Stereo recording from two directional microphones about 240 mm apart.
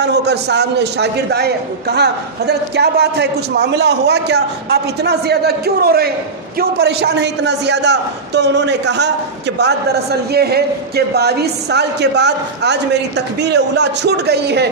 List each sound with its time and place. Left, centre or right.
0.0 s a man's voice: right